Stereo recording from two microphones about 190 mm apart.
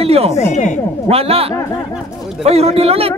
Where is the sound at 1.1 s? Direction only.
30° right (ahead or behind).